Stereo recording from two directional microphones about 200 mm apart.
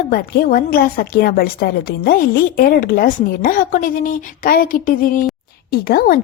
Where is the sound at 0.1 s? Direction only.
45° left (ahead or behind).